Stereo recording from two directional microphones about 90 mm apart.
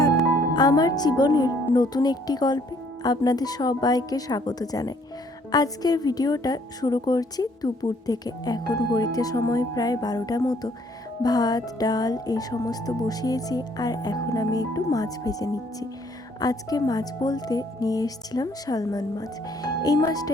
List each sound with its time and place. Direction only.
0.5 s speech: 50° left (ahead or behind)